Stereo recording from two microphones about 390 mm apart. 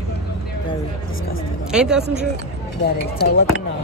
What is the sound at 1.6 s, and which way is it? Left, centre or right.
Speech, centre.